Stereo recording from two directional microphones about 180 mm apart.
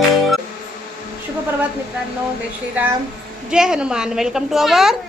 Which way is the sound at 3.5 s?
5° right (ahead or behind).